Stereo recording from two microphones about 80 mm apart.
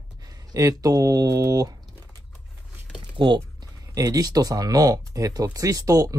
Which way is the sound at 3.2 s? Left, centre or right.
Right.